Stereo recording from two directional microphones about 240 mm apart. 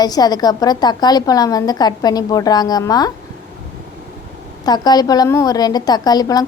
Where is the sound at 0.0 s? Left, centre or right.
Centre.